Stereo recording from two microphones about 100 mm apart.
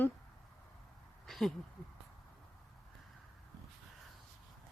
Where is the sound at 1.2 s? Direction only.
5° left (ahead or behind).